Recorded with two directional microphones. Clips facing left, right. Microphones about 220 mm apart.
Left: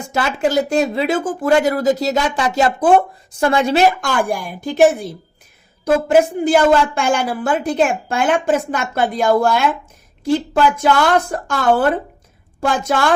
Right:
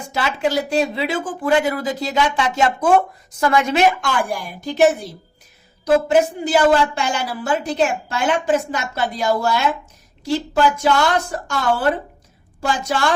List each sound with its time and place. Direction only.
0.1 s a woman's voice: 45° left (ahead or behind)
4.3 s a woman's voice: 50° left (ahead or behind)